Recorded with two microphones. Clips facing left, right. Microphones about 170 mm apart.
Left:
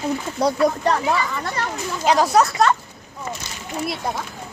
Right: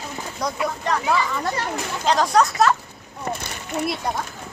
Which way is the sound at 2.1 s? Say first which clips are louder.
Left 2 dB; 10° left (ahead or behind).